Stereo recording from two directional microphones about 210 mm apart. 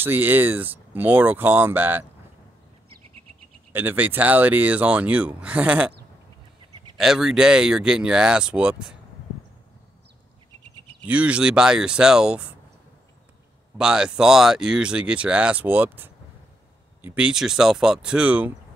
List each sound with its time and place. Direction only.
0.0 s speech: 10° right (ahead or behind)
3.7 s speech: 10° right (ahead or behind)
7.0 s speech: centre (ahead or behind)
11.1 s speech: 5° right (ahead or behind)
13.7 s speech: 5° right (ahead or behind)